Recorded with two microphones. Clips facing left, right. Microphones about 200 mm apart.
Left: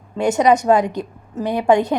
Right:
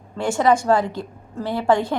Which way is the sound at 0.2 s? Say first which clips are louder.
Left 3 dB; 20° left (ahead or behind).